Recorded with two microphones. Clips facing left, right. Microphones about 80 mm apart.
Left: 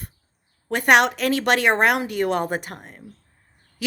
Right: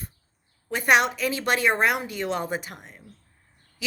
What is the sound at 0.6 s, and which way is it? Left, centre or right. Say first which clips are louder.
A woman's voice: left 4 dB; left.